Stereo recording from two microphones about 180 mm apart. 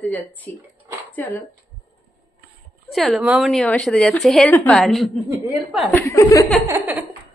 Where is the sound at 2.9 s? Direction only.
Centre (ahead or behind).